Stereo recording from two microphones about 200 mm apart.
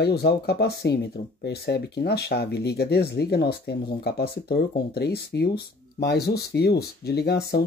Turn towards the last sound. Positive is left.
turn(degrees=55)  # may be behind; listen again after turning